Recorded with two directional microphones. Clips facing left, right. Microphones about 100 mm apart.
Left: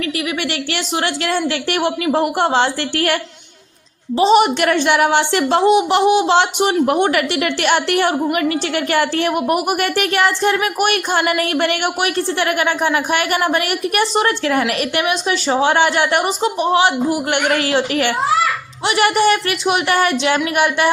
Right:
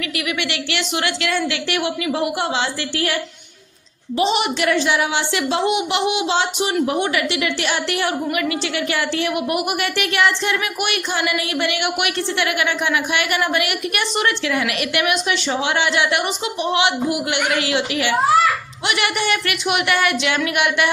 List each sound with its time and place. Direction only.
0.0 s a woman's voice: 40° left (ahead or behind)
1.5 s a woman's voice: 45° left (ahead or behind)
4.2 s a woman's voice: 40° left (ahead or behind)
6.2 s a man's voice: 60° left (ahead or behind); by 20.9 s 35° left (ahead or behind)